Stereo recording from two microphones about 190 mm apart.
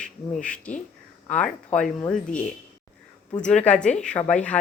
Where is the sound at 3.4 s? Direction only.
5° left (ahead or behind).